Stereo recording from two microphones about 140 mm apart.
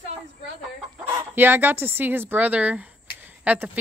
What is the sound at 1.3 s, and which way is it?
Speech, 15° right (ahead or behind).